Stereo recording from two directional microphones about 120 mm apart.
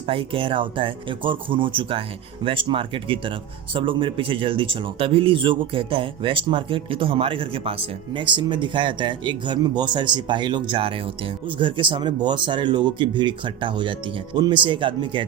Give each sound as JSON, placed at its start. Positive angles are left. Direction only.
{"t": 0.0, "sound": "speech", "side_deg": -50}